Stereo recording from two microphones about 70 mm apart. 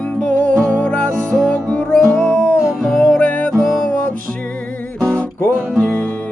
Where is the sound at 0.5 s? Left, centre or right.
Centre.